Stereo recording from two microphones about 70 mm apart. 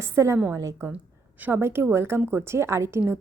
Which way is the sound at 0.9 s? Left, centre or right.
Right.